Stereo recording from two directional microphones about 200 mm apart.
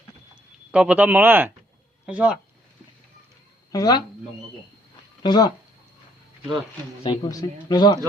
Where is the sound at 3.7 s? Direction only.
20° left (ahead or behind).